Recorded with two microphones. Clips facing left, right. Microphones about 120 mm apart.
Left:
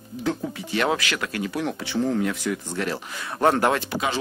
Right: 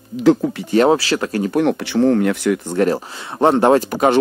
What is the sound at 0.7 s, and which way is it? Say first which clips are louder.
Speech: right 10 dB; 35° right (ahead or behind).